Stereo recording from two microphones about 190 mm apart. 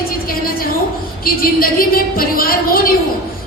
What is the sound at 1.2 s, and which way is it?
A woman's voice, 50° left (ahead or behind).